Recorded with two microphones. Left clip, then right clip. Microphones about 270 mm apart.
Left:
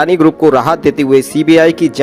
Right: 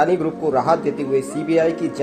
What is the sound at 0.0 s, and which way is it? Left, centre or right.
Speech, left.